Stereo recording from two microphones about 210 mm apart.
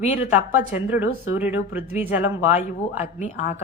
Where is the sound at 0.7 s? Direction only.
10° right (ahead or behind).